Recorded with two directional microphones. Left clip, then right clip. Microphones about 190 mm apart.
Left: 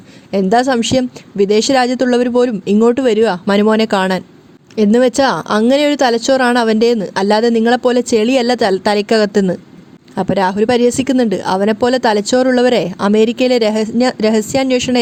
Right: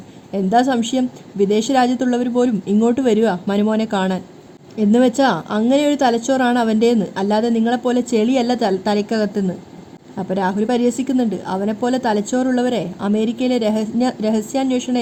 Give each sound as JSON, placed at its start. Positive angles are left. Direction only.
{"t": 0.3, "sound": "speech", "side_deg": 30}